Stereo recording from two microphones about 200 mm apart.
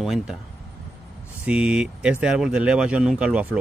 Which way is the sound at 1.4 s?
5° right (ahead or behind).